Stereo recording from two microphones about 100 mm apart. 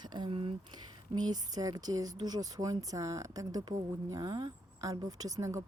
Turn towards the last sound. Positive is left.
turn(degrees=-30)  # may be behind; listen again after turning